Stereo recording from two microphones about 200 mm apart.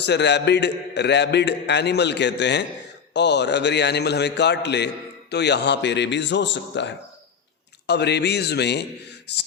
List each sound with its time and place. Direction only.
0.0 s a man's voice: 60° left (ahead or behind)